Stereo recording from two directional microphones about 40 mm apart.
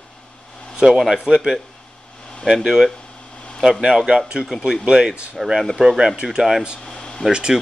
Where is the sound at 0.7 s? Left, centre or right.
Centre.